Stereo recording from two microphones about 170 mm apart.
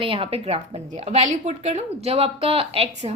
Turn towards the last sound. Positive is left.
turn(degrees=-40)  # may be behind; listen again after turning